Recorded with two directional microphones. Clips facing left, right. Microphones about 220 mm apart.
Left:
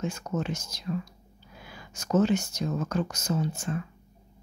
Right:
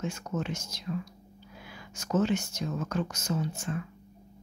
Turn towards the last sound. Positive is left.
turn(degrees=40)  # may be behind; listen again after turning